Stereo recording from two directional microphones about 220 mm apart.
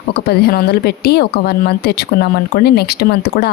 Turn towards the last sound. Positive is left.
turn(degrees=45)  # may be behind; listen again after turning